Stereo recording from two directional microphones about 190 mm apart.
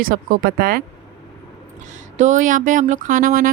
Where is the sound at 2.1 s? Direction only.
40° right (ahead or behind).